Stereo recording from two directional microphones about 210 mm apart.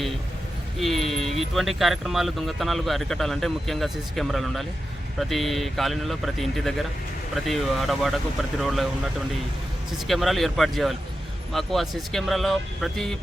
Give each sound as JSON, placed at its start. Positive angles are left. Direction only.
{"t": 0.8, "sound": "a sound", "side_deg": 0}
{"t": 1.4, "sound": "speech", "side_deg": 0}
{"t": 10.1, "sound": "speech", "side_deg": 0}